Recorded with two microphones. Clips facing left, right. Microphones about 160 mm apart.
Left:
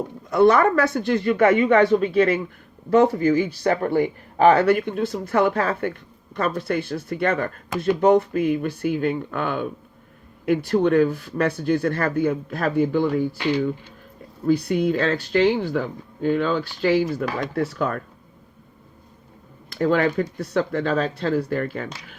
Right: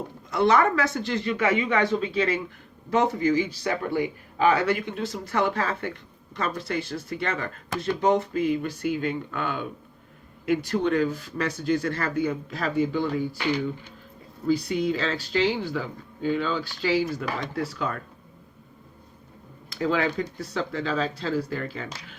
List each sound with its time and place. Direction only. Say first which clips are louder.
0.3 s speech: left 5 dB; 50° left (ahead or behind)
14.4 s speech: left 4 dB; 55° left (ahead or behind)
19.7 s speech: left 5 dB; 55° left (ahead or behind)